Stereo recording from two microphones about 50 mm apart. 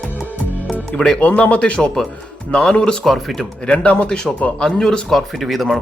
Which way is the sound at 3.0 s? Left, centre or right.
Centre.